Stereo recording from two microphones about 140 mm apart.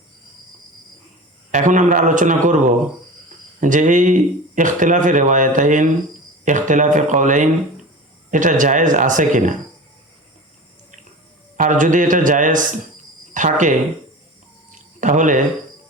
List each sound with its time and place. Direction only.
1.5 s speech: 60° right (ahead or behind)
11.5 s speech: 65° right (ahead or behind)
14.7 s a sound: 65° right (ahead or behind)